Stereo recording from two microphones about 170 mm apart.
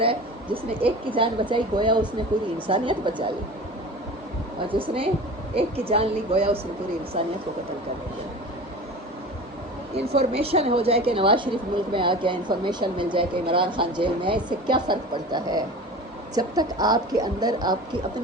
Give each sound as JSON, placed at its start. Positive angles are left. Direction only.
{"t": 0.0, "sound": "a woman's voice", "side_deg": -30}
{"t": 4.7, "sound": "speech", "side_deg": -30}
{"t": 10.2, "sound": "a woman's voice", "side_deg": -35}